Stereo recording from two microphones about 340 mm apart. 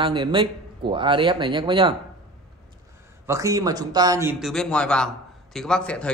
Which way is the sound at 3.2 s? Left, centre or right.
Centre.